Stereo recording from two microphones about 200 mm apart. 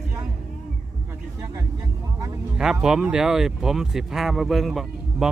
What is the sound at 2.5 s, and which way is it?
Speech, 5° right (ahead or behind).